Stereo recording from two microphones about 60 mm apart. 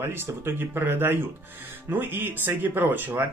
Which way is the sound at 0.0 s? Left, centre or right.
Right.